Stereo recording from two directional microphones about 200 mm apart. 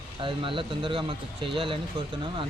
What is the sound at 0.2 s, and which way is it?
Speech, 25° right (ahead or behind).